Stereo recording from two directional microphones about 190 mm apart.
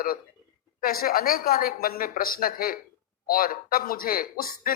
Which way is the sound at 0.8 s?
50° left (ahead or behind).